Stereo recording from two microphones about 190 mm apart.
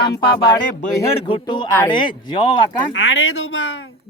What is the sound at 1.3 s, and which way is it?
Speech, 25° left (ahead or behind).